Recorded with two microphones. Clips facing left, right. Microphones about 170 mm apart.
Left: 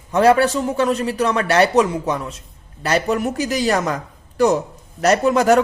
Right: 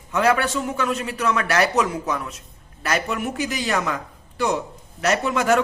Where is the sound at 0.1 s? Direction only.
30° left (ahead or behind).